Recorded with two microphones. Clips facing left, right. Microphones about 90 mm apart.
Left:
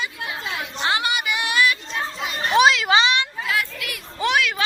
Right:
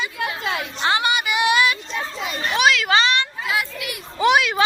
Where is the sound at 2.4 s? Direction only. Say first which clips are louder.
Left 3 dB; 30° left (ahead or behind).